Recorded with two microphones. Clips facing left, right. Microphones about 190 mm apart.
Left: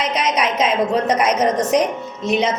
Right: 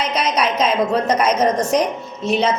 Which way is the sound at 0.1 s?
20° left (ahead or behind).